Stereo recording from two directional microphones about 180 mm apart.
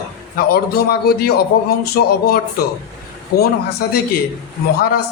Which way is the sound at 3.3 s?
60° left (ahead or behind).